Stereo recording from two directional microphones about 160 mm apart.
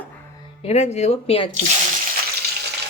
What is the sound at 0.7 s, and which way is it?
Speech, 45° left (ahead or behind).